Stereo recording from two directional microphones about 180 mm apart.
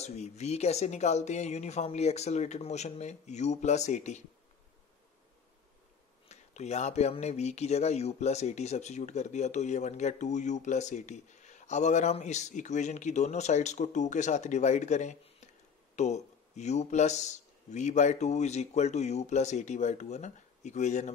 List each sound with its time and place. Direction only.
0.0 s speech: 40° left (ahead or behind)
6.2 s speech: 40° left (ahead or behind)